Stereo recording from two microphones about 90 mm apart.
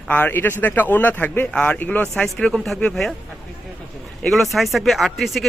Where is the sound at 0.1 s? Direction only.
20° left (ahead or behind).